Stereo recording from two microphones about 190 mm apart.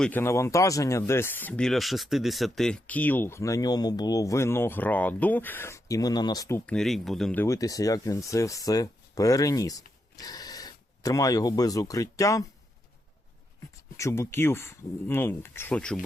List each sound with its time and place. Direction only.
0.0 s speech: 10° left (ahead or behind)
6.7 s speech: centre (ahead or behind)
7.4 s speech: 15° left (ahead or behind)
13.9 s speech: 15° left (ahead or behind)